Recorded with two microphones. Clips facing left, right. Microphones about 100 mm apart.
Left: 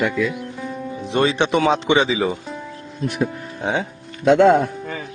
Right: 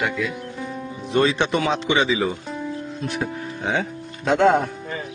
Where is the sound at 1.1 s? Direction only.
50° left (ahead or behind).